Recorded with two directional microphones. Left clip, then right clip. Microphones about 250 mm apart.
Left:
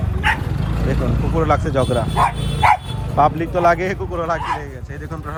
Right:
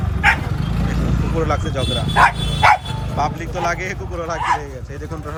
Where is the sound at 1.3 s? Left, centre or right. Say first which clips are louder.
Left 4 dB; centre.